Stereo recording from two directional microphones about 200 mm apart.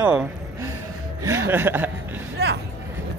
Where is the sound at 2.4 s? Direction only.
50° right (ahead or behind).